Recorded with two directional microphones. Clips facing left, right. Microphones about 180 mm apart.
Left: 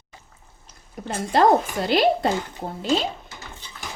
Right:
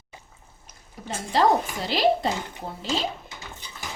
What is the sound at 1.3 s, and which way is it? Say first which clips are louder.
Speech: left 3 dB; 55° left (ahead or behind).